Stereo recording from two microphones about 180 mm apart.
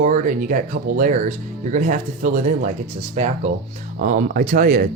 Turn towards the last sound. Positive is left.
turn(degrees=-50)  # may be behind; listen again after turning